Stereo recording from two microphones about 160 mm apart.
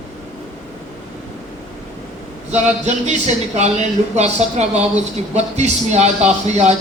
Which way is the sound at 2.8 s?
45° right (ahead or behind).